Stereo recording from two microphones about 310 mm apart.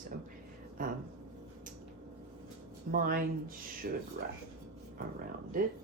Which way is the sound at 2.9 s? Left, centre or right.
Right.